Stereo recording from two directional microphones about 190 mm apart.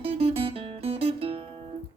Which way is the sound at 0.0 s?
30° right (ahead or behind).